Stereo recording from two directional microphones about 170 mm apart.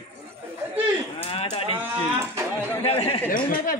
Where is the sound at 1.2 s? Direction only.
35° left (ahead or behind).